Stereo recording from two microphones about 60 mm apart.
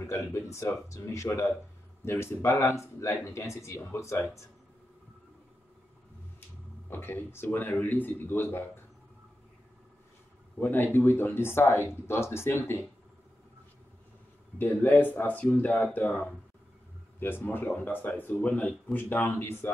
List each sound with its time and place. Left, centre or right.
0.1 s speech: left
2.0 s speech: left
6.9 s speech: left
10.6 s speech: left
14.6 s speech: left
17.2 s speech: left
19.4 s speech: left